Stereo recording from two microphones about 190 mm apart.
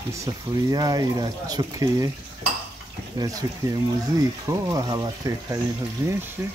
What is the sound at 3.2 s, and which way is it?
Speech, 20° right (ahead or behind).